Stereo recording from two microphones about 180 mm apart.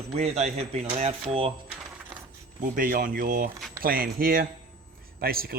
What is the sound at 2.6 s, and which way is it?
A man's voice, 50° right (ahead or behind).